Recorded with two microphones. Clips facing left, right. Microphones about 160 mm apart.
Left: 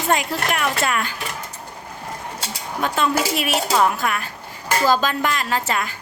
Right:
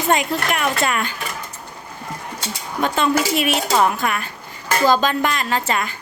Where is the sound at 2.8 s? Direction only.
5° left (ahead or behind).